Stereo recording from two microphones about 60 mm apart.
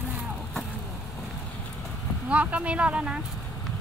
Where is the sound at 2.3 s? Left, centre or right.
Right.